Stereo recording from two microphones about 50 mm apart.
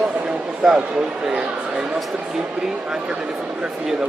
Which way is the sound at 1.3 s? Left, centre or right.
Centre.